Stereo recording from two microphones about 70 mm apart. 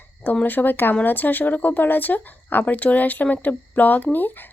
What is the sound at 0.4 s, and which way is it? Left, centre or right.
Speech, left.